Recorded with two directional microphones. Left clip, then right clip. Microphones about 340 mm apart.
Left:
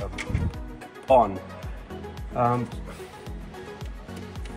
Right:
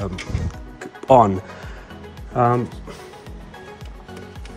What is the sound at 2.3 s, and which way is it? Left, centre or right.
Speech, right.